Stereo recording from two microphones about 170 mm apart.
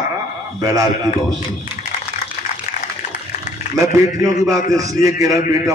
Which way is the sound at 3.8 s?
20° right (ahead or behind).